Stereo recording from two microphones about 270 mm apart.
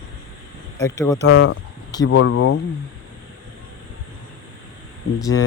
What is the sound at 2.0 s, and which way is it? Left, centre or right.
Speech, left.